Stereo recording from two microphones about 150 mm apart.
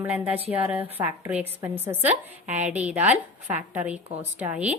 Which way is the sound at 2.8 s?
10° right (ahead or behind).